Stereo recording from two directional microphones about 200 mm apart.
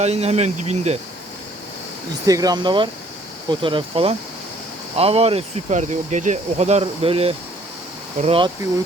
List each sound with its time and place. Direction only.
0.0 s speech: 30° right (ahead or behind)
2.2 s speech: 20° right (ahead or behind)